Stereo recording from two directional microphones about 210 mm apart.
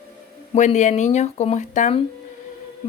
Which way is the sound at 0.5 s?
35° left (ahead or behind).